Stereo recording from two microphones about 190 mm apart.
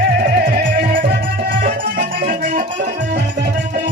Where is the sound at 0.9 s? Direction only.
45° right (ahead or behind).